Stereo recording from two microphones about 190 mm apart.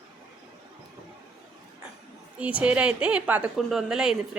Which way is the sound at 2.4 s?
5° right (ahead or behind).